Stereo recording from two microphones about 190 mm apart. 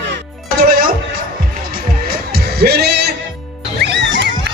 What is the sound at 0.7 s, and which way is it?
Music, 50° right (ahead or behind).